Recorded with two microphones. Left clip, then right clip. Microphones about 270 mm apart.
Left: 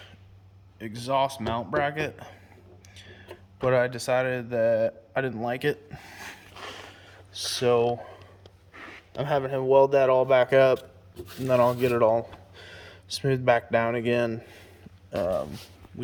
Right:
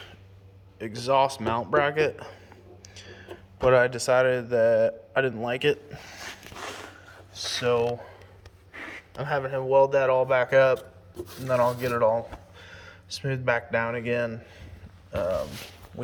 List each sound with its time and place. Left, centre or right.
0.8 s speech: centre
7.4 s speech: left
8.7 s a sound: right
9.1 s speech: left